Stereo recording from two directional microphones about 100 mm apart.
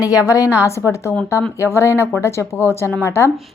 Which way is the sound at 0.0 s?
35° left (ahead or behind).